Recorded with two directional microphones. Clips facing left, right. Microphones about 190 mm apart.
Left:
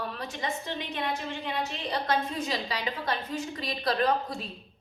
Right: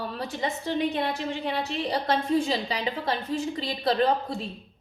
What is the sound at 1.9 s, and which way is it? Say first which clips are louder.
A woman's voice: right 5 dB; 30° right (ahead or behind).